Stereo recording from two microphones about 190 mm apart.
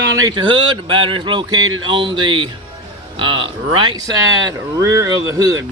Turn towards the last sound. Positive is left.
turn(degrees=-20)  # may be behind; listen again after turning